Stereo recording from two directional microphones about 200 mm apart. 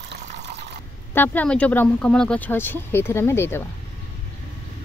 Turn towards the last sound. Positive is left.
turn(degrees=10)  # may be behind; listen again after turning